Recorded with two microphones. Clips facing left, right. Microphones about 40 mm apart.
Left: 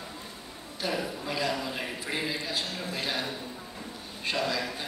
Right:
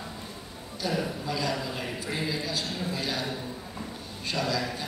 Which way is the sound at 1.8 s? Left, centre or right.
Left.